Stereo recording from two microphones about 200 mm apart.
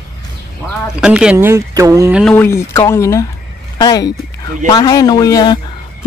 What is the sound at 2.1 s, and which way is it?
Speech, centre (ahead or behind).